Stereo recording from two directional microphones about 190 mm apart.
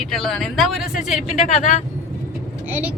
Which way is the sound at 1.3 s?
35° left (ahead or behind).